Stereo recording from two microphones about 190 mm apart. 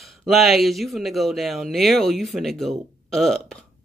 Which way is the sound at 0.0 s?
Centre (ahead or behind).